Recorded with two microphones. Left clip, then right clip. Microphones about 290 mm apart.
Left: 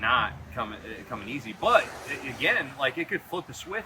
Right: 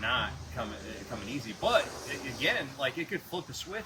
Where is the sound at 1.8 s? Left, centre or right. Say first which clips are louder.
Left 3 dB; left.